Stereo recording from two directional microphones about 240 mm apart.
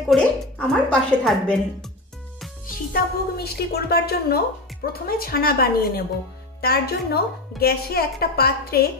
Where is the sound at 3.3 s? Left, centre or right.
Left.